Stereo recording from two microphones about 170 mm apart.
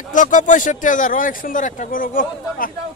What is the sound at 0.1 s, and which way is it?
Speech, 50° left (ahead or behind).